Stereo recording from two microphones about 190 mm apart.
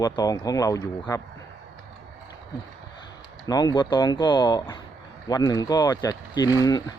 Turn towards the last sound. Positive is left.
turn(degrees=15)  # may be behind; listen again after turning